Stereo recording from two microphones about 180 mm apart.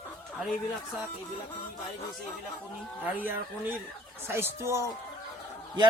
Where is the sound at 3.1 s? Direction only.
10° right (ahead or behind).